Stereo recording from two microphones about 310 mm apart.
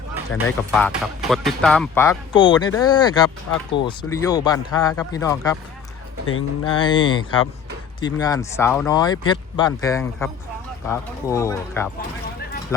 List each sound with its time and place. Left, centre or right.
0.8 s speech: centre
6.2 s speech: left
6.7 s speech: centre